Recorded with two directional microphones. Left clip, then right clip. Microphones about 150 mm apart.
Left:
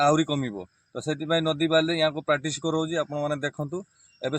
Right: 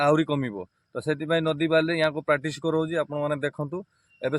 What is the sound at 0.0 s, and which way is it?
Speech, 40° right (ahead or behind).